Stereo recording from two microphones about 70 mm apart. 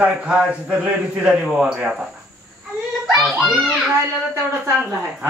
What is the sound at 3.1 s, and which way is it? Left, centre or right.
Speech, centre.